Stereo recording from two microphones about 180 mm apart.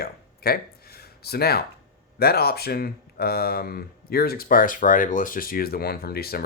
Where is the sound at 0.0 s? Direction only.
55° left (ahead or behind).